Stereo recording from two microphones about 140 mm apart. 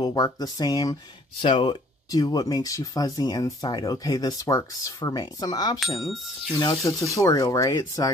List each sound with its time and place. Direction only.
0.0 s speech: 30° left (ahead or behind)
1.4 s speech: 35° left (ahead or behind)
5.9 s speech: centre (ahead or behind)
6.5 s speech: 25° left (ahead or behind)